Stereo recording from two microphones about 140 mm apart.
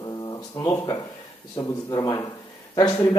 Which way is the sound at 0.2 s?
25° left (ahead or behind).